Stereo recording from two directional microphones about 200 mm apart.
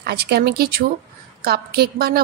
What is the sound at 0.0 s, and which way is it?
A woman's voice, 55° right (ahead or behind).